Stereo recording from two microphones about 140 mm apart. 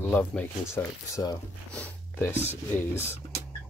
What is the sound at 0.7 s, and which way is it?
Speech, 25° left (ahead or behind).